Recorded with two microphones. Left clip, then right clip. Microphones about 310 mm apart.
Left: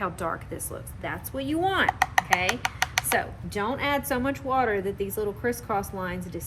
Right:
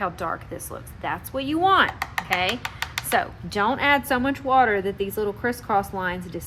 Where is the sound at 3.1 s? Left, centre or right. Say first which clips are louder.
Right 3 dB; centre.